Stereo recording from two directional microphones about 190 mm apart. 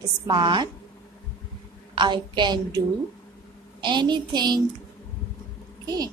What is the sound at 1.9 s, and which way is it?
A woman's voice, 25° right (ahead or behind).